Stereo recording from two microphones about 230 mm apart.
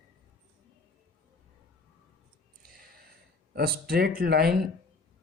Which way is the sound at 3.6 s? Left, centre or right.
Right.